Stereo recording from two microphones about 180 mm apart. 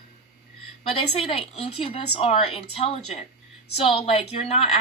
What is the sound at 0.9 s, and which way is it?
A woman's voice, 35° left (ahead or behind).